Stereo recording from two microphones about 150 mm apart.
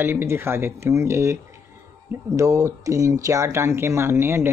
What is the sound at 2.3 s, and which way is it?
Speech, 20° right (ahead or behind).